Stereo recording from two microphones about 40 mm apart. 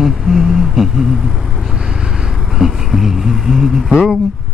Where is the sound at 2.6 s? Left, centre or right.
Centre.